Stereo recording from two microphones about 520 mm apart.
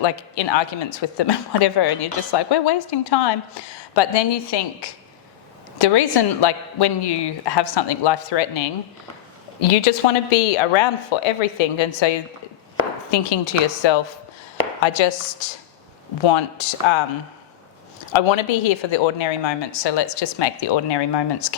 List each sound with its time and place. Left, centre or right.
0.0 s a woman's voice: left
9.6 s a woman's voice: left
16.6 s a woman's voice: left
18.1 s a woman's voice: left